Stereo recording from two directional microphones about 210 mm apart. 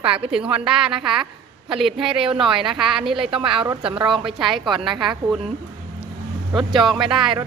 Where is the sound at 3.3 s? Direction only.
25° right (ahead or behind).